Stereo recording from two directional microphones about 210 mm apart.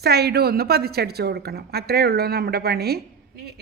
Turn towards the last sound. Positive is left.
turn(degrees=-50)  # may be behind; listen again after turning